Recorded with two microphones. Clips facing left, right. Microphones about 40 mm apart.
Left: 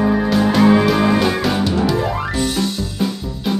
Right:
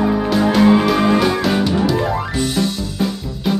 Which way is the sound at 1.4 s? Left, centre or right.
Centre.